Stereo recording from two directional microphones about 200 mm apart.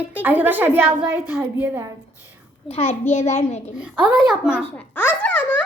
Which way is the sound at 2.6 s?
30° left (ahead or behind).